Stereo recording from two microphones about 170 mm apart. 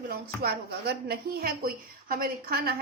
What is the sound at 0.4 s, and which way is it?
A woman's voice, 70° right (ahead or behind).